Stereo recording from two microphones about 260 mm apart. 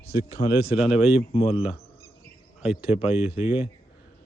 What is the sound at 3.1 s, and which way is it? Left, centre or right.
Speech, centre.